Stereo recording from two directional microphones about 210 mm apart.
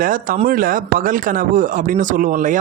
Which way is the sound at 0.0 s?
40° right (ahead or behind).